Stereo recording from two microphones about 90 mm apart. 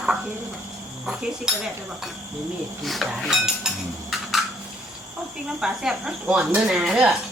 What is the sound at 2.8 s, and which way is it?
Speech, centre (ahead or behind).